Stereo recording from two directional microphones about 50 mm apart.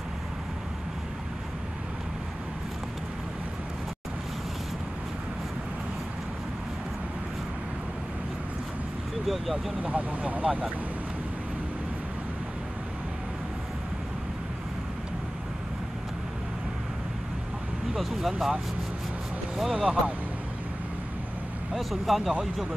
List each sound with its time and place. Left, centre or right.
9.8 s speech: right
17.9 s speech: centre
19.7 s speech: right
21.7 s speech: centre